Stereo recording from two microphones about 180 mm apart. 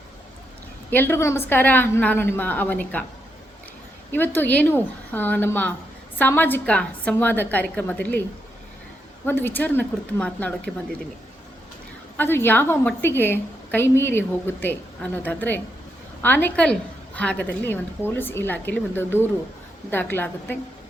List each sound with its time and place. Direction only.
0.9 s a woman's voice: 10° left (ahead or behind)
4.1 s a woman's voice: 10° left (ahead or behind)
9.2 s a woman's voice: 10° left (ahead or behind)
12.1 s a woman's voice: 10° left (ahead or behind)